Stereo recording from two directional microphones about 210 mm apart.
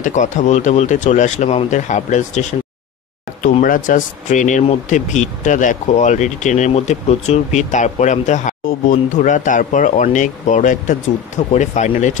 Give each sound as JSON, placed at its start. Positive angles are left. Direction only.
{"t": 0.0, "sound": "speech", "side_deg": 35}
{"t": 3.6, "sound": "speech", "side_deg": 40}